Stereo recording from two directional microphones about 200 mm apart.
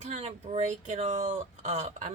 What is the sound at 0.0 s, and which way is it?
Speech, 35° right (ahead or behind).